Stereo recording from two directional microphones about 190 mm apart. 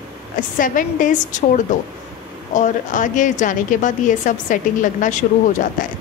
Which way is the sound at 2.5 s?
40° left (ahead or behind).